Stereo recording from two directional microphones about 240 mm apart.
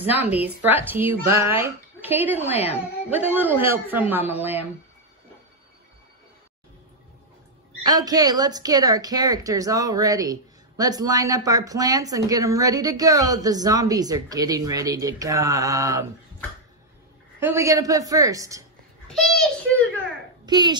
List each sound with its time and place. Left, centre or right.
0.7 s a woman's voice: centre
7.8 s a woman's voice: centre
17.4 s a woman's voice: centre
19.0 s a child's voice: centre
20.4 s speech: centre